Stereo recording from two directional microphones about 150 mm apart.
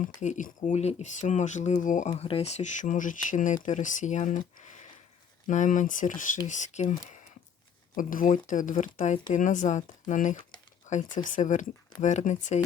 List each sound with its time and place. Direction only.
0.2 s speech: 55° left (ahead or behind)
7.9 s speech: 60° left (ahead or behind)